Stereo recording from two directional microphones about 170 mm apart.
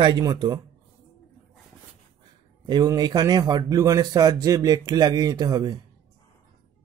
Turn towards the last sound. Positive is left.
turn(degrees=-20)  # may be behind; listen again after turning